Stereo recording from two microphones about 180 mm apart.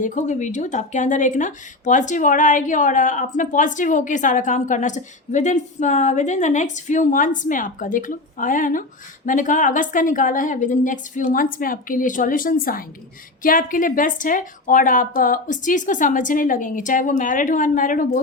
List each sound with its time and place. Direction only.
0.0 s speech: 45° left (ahead or behind)